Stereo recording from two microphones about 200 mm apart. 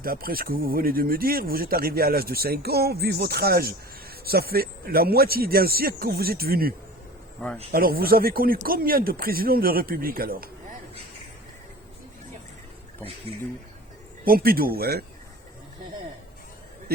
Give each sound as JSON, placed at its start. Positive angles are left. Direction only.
{"t": 0.0, "sound": "speech", "side_deg": -45}
{"t": 14.3, "sound": "speech", "side_deg": -50}